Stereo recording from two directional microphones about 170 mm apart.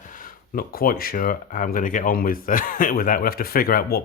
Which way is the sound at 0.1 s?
55° left (ahead or behind).